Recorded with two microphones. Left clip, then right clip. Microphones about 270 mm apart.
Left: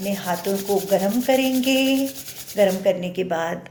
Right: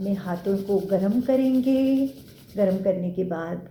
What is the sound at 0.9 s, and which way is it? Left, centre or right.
A woman's voice, left.